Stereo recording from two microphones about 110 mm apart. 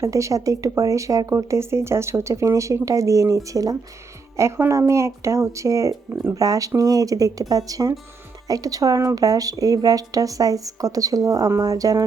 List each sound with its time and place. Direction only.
0.0 s speech: 30° right (ahead or behind)